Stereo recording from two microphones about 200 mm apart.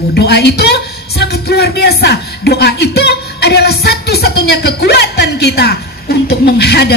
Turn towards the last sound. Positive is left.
turn(degrees=55)  # may be behind; listen again after turning